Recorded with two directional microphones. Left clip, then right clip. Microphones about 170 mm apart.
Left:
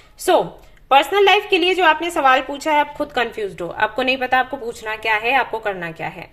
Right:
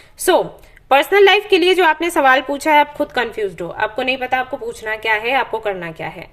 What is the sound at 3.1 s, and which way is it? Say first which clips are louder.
A woman's voice: even; 10° right (ahead or behind).